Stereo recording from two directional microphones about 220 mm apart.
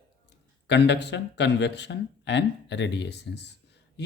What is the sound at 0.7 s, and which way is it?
Speech, 50° left (ahead or behind).